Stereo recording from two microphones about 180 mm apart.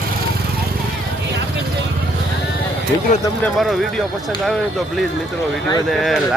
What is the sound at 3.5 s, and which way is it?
Speech, centre (ahead or behind).